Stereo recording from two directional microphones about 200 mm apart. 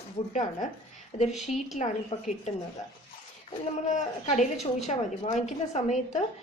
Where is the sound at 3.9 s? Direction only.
35° left (ahead or behind).